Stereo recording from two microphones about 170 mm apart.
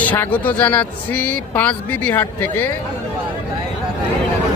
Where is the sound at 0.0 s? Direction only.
10° left (ahead or behind).